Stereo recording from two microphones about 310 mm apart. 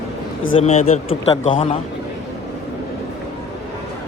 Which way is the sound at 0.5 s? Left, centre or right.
Left.